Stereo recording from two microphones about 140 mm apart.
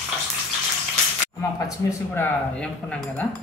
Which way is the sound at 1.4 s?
25° left (ahead or behind).